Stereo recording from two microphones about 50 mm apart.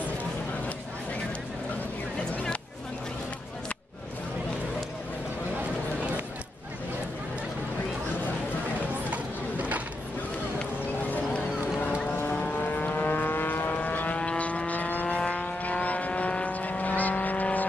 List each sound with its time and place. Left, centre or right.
9.1 s a sound: right
11.1 s boat: left
12.4 s vehicle: left